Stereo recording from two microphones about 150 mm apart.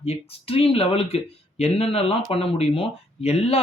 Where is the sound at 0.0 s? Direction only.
40° left (ahead or behind).